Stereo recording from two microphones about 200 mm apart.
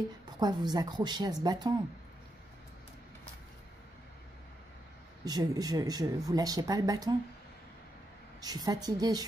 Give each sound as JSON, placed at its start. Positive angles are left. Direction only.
{"t": 0.4, "sound": "speech", "side_deg": -20}
{"t": 5.2, "sound": "speech", "side_deg": -20}
{"t": 8.4, "sound": "speech", "side_deg": -20}